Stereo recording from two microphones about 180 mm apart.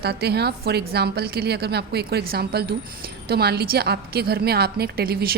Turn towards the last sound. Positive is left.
turn(degrees=-55)  # may be behind; listen again after turning